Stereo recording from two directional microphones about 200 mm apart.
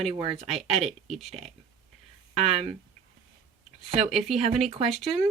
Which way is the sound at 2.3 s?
30° right (ahead or behind).